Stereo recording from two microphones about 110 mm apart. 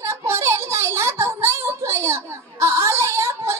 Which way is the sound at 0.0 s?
25° right (ahead or behind).